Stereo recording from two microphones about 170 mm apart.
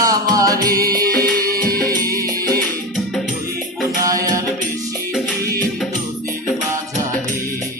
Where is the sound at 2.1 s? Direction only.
60° right (ahead or behind).